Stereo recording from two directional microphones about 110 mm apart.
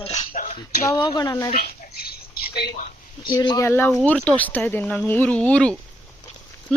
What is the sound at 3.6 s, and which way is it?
Speech, 20° left (ahead or behind).